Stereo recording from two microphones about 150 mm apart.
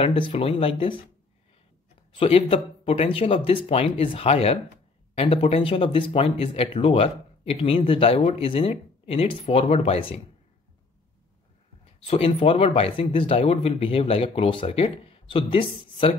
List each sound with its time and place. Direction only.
0.0 s speech: 35° left (ahead or behind)
2.1 s speech: 40° left (ahead or behind)
12.1 s speech: 35° left (ahead or behind)